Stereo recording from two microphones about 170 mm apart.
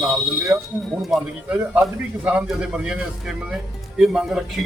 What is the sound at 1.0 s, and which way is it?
Speech, centre (ahead or behind).